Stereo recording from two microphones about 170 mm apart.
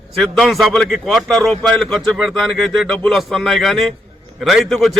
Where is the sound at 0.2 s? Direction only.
Centre (ahead or behind).